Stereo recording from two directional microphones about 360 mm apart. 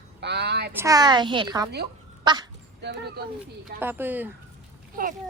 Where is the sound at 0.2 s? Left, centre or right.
Right.